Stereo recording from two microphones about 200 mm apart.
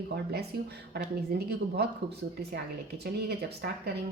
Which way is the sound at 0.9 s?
55° right (ahead or behind).